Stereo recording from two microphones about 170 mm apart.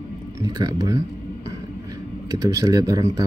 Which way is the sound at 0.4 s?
20° right (ahead or behind).